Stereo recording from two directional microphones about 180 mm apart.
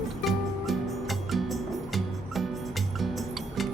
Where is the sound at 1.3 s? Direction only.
Centre (ahead or behind).